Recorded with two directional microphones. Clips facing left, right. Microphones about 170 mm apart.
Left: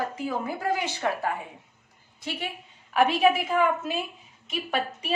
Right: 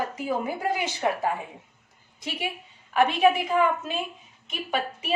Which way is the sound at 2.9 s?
Centre (ahead or behind).